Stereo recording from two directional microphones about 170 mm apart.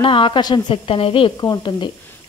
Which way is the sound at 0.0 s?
30° left (ahead or behind).